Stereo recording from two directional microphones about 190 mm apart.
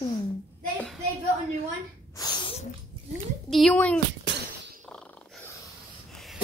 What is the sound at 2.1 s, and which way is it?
Sneeze, 20° left (ahead or behind).